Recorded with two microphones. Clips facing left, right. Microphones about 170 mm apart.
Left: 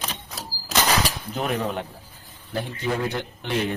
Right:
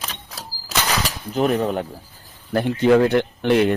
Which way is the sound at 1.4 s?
40° right (ahead or behind).